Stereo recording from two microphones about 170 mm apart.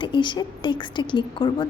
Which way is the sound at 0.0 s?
30° left (ahead or behind).